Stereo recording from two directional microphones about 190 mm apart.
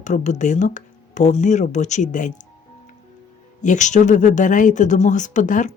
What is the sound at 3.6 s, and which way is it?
Speech, 40° left (ahead or behind).